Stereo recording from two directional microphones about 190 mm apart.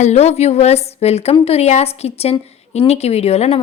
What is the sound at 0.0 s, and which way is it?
A woman's voice, 35° left (ahead or behind).